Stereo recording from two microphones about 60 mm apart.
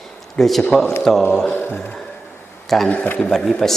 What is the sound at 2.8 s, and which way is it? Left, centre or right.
Speech, left.